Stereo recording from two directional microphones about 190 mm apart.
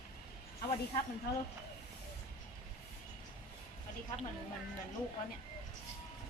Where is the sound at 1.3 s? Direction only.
60° left (ahead or behind).